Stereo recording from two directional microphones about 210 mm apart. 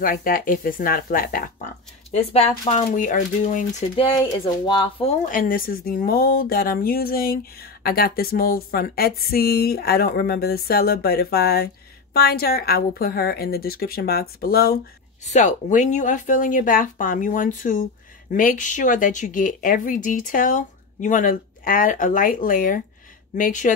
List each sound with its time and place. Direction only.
0.0 s a woman's voice: 40° left (ahead or behind)
2.0 s speech: 30° left (ahead or behind)
3.9 s speech: 25° left (ahead or behind)
5.2 s a woman's voice: 40° left (ahead or behind)
15.2 s speech: 35° left (ahead or behind)